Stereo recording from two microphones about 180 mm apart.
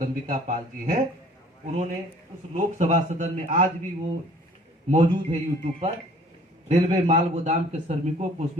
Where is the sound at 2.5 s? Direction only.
40° right (ahead or behind).